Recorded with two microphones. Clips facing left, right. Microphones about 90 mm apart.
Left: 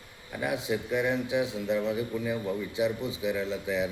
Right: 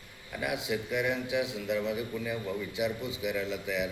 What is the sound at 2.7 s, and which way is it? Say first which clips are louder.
A man's voice: left 4 dB; 30° left (ahead or behind).